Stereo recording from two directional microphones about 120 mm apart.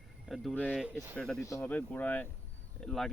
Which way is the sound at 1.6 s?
15° left (ahead or behind).